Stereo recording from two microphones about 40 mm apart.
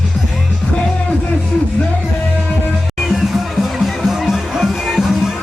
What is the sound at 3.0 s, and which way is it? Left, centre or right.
Music, centre.